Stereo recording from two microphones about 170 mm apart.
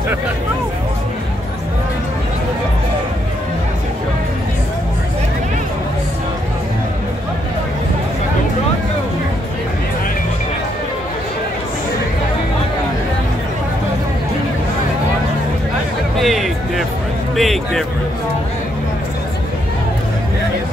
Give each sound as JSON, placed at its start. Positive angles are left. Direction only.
{"t": 16.2, "sound": "speech", "side_deg": 0}